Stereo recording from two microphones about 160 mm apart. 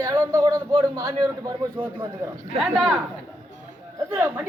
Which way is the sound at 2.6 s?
Centre (ahead or behind).